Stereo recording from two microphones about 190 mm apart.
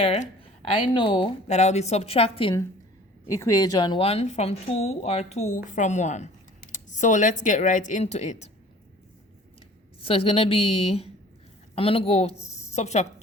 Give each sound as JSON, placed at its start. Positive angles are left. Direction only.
{"t": 0.0, "sound": "a woman's voice", "side_deg": 35}
{"t": 3.2, "sound": "a woman's voice", "side_deg": 15}
{"t": 10.0, "sound": "a woman's voice", "side_deg": 30}